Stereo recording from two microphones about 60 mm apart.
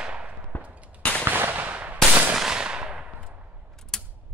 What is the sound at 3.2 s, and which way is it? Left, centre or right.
Gunshot, right.